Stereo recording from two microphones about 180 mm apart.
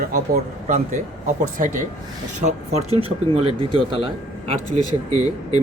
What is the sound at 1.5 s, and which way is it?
Speech, 45° right (ahead or behind).